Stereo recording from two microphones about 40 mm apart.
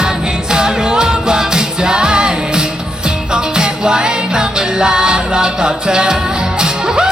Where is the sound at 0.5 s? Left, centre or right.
Centre.